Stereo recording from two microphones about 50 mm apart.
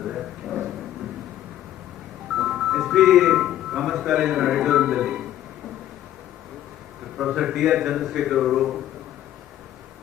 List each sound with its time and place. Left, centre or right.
0.0 s a sound: centre
2.3 s music: centre
4.2 s a man's voice: centre
7.2 s a man's voice: centre